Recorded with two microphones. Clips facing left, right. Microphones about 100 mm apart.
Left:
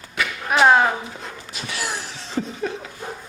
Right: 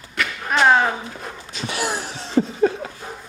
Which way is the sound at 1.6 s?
30° right (ahead or behind).